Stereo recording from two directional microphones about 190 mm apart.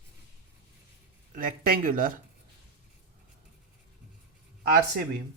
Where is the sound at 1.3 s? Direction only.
50° right (ahead or behind).